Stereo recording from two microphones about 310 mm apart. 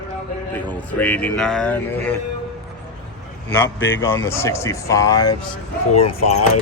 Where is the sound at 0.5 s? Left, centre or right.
Centre.